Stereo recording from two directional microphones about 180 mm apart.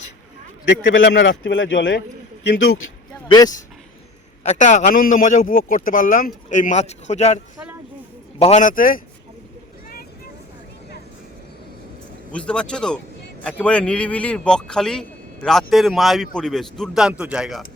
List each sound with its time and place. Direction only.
0.6 s a man's voice: 85° left
4.4 s a man's voice: 40° left (ahead or behind)
8.4 s a man's voice: 40° left (ahead or behind)
12.3 s a man's voice: 5° left (ahead or behind)